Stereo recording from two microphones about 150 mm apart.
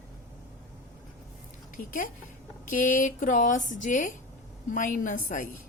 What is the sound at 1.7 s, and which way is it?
A woman's voice, 60° left (ahead or behind).